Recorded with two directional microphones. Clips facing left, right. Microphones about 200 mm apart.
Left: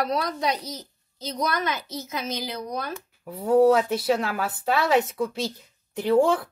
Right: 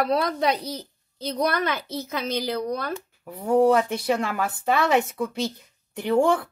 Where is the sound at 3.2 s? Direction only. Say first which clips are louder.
Left 1 dB; 10° left (ahead or behind).